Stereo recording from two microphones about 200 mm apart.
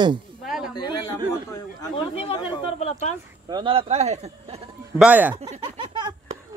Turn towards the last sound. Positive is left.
turn(degrees=-25)  # may be behind; listen again after turning